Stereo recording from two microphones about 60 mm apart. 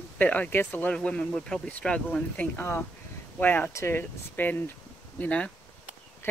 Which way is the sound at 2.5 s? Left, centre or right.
Left.